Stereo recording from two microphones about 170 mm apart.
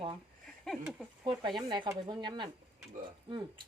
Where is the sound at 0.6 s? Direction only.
Centre (ahead or behind).